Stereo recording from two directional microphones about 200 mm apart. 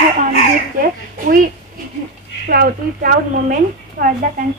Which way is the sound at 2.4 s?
50° right (ahead or behind).